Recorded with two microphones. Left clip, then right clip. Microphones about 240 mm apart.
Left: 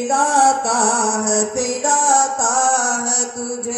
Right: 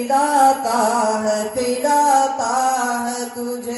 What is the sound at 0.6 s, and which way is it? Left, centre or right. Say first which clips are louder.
Music: even; left.